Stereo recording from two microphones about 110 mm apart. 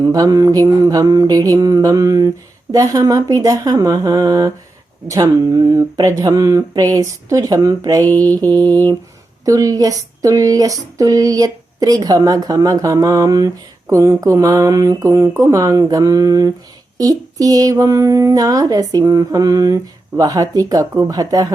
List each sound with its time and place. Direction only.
0.0 s speech: 35° right (ahead or behind)